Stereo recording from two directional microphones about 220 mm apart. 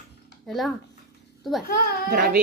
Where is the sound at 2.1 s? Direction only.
40° right (ahead or behind).